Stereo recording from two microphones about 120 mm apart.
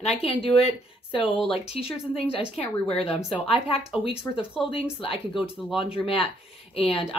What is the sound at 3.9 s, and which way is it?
Speech, 50° left (ahead or behind).